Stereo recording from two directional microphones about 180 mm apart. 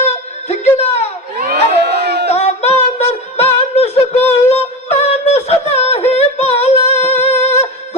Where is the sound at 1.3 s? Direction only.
60° right (ahead or behind).